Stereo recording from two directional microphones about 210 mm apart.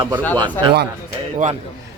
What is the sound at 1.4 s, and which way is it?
Speech, 40° right (ahead or behind).